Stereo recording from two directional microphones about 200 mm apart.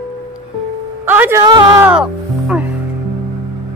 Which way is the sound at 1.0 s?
10° right (ahead or behind).